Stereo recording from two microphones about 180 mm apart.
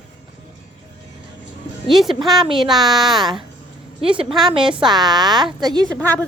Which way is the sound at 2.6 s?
Centre (ahead or behind).